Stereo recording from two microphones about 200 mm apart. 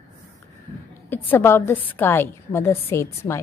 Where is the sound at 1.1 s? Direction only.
10° left (ahead or behind).